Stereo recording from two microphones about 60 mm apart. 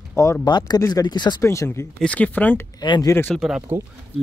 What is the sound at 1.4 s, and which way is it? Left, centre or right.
Speech, left.